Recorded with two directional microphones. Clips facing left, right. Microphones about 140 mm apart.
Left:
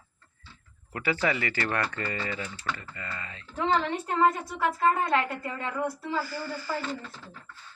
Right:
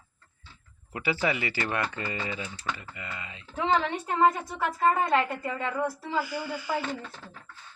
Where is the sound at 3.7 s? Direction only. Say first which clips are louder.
Right 1 dB; 5° right (ahead or behind).